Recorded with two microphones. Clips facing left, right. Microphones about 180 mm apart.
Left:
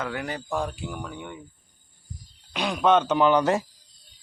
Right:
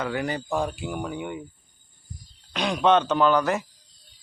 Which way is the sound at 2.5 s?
5° left (ahead or behind).